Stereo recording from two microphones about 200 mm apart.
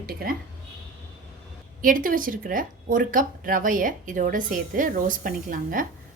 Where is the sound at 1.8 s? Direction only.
45° right (ahead or behind).